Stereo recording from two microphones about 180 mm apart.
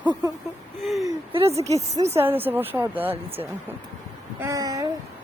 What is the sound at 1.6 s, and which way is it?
A woman's voice, 20° right (ahead or behind).